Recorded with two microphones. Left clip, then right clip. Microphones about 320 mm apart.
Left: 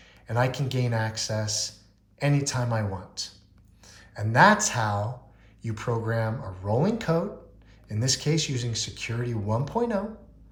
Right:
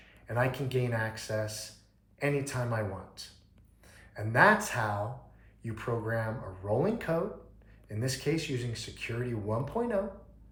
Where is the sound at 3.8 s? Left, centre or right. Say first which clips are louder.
Left 4 dB; left.